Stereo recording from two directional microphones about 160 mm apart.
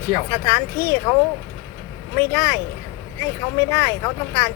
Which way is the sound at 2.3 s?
15° left (ahead or behind).